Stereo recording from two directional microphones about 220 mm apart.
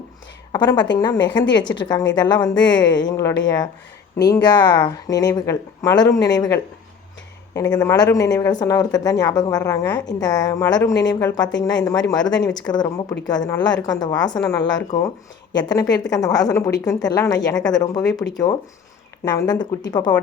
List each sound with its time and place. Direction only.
0.5 s speech: 20° left (ahead or behind)